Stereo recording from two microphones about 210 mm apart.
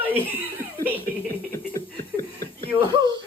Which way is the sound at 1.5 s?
45° right (ahead or behind).